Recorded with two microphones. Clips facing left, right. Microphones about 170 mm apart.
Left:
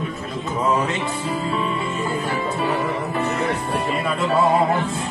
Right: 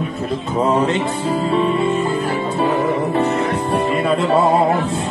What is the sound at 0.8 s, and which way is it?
Music, 30° right (ahead or behind).